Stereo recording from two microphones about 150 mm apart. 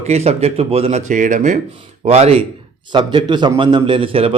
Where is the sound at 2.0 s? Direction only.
45° right (ahead or behind).